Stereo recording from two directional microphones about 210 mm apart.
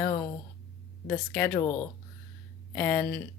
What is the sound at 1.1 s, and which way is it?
Speech, 10° left (ahead or behind).